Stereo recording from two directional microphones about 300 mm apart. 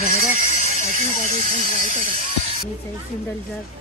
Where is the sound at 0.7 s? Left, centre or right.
Left.